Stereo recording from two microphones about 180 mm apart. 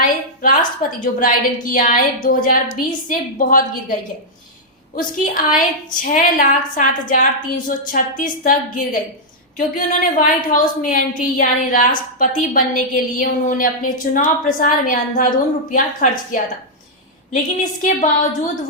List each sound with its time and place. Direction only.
0.0 s a woman's voice: 50° left (ahead or behind)
4.9 s a woman's voice: 50° left (ahead or behind)